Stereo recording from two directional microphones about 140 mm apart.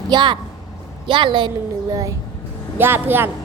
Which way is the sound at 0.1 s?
35° right (ahead or behind).